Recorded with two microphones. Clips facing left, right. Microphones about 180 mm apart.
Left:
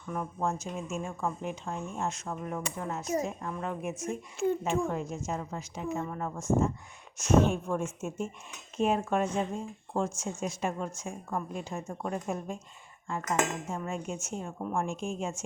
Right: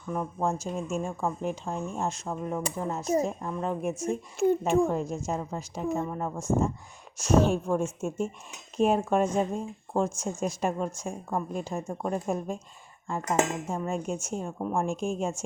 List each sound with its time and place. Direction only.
0.1 s speech: 30° right (ahead or behind)
6.1 s speech: 25° right (ahead or behind)
8.8 s speech: 35° right (ahead or behind)